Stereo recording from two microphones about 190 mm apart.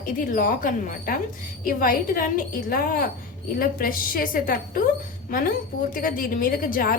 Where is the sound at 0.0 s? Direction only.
45° left (ahead or behind).